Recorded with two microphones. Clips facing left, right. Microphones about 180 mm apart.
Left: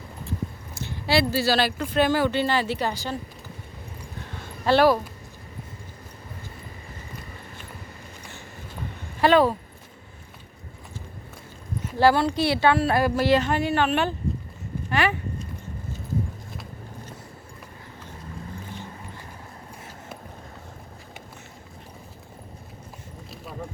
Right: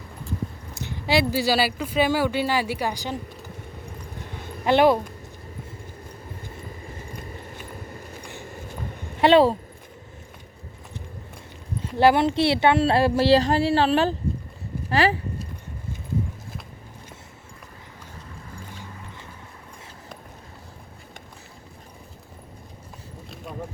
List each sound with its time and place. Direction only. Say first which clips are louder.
0.7 s speech: right 1 dB; 15° right (ahead or behind)
4.4 s a sound: right 1 dB; 15° right (ahead or behind)
9.2 s a woman's voice: right 2 dB; 25° right (ahead or behind)
11.8 s a woman's voice: right 1 dB; 20° right (ahead or behind)